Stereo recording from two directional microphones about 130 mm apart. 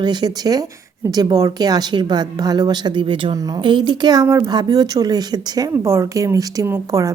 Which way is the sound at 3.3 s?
25° right (ahead or behind).